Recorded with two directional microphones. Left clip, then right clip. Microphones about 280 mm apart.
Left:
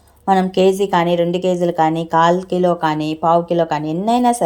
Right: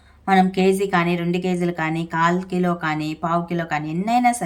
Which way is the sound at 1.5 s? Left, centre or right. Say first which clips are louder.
Left 7 dB; centre.